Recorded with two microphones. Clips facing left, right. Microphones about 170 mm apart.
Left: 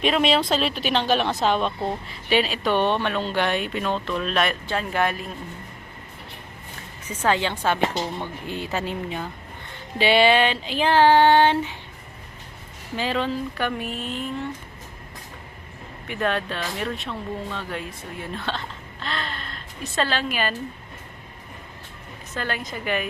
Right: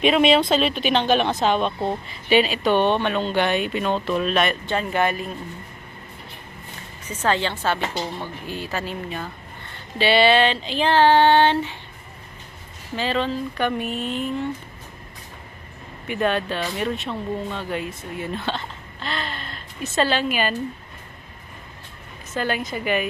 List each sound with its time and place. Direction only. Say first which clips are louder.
0.0 s speech: right 4 dB; centre (ahead or behind)
7.0 s female singing: even; 10° left (ahead or behind)
8.2 s speech: even; 20° left (ahead or behind)
10.0 s female singing: right 1 dB; 15° left (ahead or behind)
13.0 s speech: right 1 dB; 10° left (ahead or behind)
16.0 s speech: right 3 dB; centre (ahead or behind)
22.4 s a woman's voice: right 5 dB; 5° right (ahead or behind)